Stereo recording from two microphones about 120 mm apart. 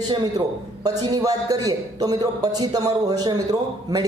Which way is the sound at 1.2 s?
30° right (ahead or behind).